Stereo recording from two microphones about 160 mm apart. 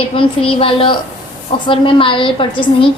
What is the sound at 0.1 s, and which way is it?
A woman's voice, 35° left (ahead or behind).